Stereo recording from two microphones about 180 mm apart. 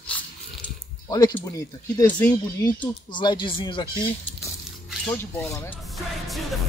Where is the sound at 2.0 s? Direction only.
10° left (ahead or behind).